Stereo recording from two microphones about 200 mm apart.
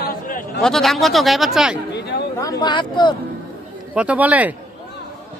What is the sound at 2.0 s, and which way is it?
Chatter, 55° left (ahead or behind).